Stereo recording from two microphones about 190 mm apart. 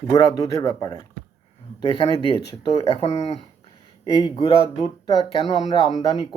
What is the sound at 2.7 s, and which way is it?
Speech, 35° left (ahead or behind).